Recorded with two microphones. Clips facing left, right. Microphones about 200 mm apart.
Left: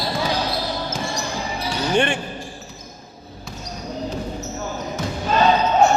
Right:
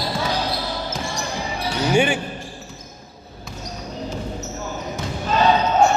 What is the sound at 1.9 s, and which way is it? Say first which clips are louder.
Speech: right 1 dB; 5° right (ahead or behind).